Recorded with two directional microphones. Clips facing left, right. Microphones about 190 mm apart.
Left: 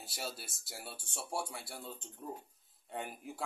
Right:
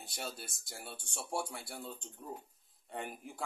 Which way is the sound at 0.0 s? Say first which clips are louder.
Even; 5° left (ahead or behind).